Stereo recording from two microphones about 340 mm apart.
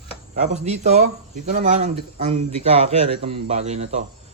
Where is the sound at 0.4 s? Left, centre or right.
Centre.